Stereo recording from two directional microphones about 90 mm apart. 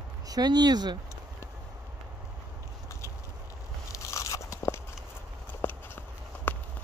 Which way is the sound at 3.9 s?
35° left (ahead or behind).